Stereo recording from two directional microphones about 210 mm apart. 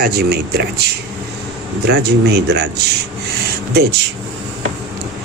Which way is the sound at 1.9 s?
50° right (ahead or behind).